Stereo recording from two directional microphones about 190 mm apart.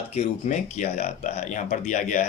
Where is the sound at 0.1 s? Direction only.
35° left (ahead or behind).